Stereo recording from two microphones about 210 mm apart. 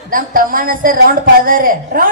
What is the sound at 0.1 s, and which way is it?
A woman's voice, 40° right (ahead or behind).